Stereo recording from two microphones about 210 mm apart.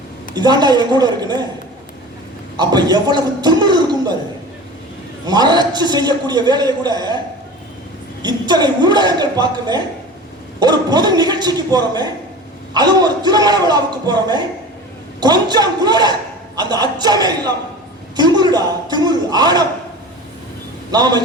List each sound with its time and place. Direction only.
0.3 s a man's voice: 20° right (ahead or behind)
2.6 s a man's voice: 20° right (ahead or behind)
5.2 s a man's voice: 20° right (ahead or behind)
8.2 s a man's voice: 20° right (ahead or behind)
18.2 s a sound: 20° right (ahead or behind)
20.9 s a man's voice: 20° right (ahead or behind)